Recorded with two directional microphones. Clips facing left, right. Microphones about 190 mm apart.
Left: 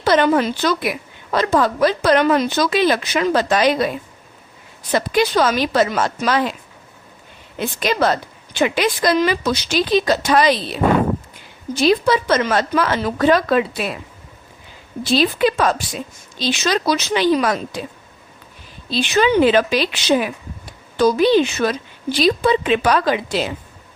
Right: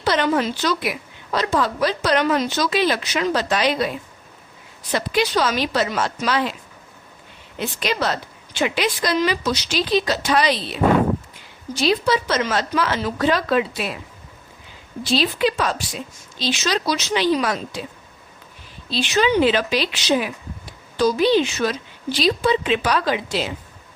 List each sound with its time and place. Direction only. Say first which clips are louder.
0.0 s a woman's voice: left 4 dB; 50° left (ahead or behind)
4.9 s a woman's voice: left 4 dB; 50° left (ahead or behind)
7.8 s a woman's voice: left 5 dB; 50° left (ahead or behind)
15.1 s a woman's voice: left 3 dB; 50° left (ahead or behind)
18.9 s a woman's voice: left 3 dB; 50° left (ahead or behind)